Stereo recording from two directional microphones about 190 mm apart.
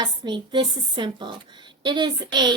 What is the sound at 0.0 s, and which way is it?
A woman's voice, 25° right (ahead or behind).